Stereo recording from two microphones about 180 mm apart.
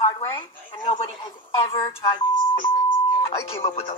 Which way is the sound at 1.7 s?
25° left (ahead or behind).